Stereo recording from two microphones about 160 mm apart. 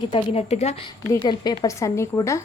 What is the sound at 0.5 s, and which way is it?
Speech, 40° left (ahead or behind).